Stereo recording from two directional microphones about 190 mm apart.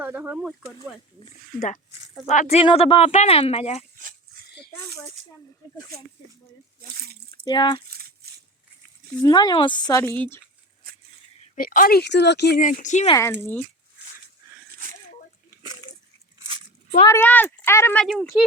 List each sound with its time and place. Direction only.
0.0 s speech: 10° right (ahead or behind)
1.5 s speech: 45° left (ahead or behind)
3.9 s dog: 45° right (ahead or behind)
7.1 s a sound: 55° right (ahead or behind)
7.4 s speech: 25° left (ahead or behind)
8.2 s a sound: 55° right (ahead or behind)
9.2 s speech: 20° left (ahead or behind)
11.5 s speech: 45° left (ahead or behind); by 12.5 s 60° left (ahead or behind)
12.5 s speech: 45° left (ahead or behind)
13.4 s speech: 10° left (ahead or behind)
17.1 s speech: 10° left (ahead or behind)